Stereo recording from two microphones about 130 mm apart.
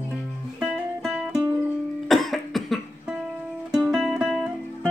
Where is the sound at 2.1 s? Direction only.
Centre (ahead or behind).